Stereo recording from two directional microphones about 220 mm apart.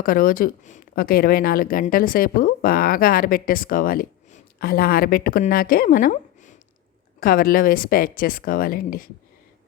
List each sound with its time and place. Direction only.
0.0 s a woman's voice: 40° left (ahead or behind)